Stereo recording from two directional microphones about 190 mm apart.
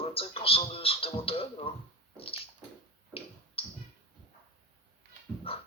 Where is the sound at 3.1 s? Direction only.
30° left (ahead or behind).